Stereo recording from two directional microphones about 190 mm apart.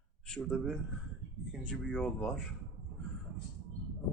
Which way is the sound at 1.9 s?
5° left (ahead or behind).